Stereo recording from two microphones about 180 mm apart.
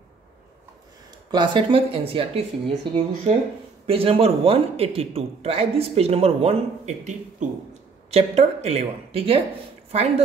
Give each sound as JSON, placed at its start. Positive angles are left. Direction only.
{"t": 1.3, "sound": "speech", "side_deg": -25}
{"t": 3.8, "sound": "a man's voice", "side_deg": -30}